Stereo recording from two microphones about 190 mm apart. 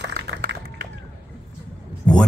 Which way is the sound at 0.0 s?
65° right (ahead or behind).